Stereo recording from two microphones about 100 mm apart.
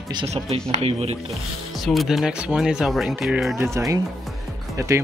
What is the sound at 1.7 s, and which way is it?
Speech, centre (ahead or behind).